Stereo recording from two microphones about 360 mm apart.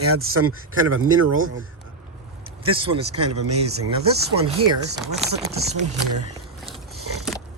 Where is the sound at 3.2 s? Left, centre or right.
Right.